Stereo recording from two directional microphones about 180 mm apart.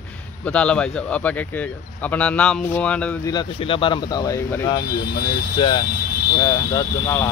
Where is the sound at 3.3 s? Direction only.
25° left (ahead or behind).